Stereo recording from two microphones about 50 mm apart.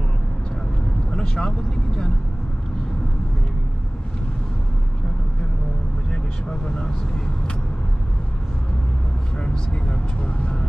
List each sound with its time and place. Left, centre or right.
1.1 s vehicle: centre
6.5 s speech: centre
9.4 s speech: left